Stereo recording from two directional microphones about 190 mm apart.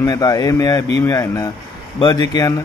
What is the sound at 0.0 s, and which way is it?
Speech, 20° left (ahead or behind).